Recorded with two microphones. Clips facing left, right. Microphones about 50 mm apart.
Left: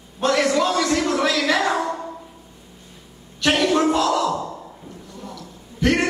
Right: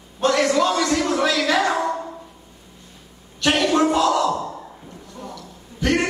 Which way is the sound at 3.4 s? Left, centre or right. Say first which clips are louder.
Even; centre.